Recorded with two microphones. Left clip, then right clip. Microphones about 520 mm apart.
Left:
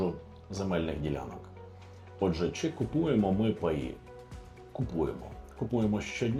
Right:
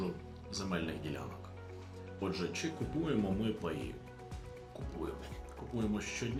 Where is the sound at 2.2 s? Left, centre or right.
Left.